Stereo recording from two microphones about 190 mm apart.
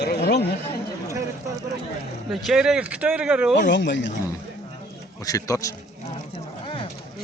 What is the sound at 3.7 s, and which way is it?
Speech, 70° left (ahead or behind).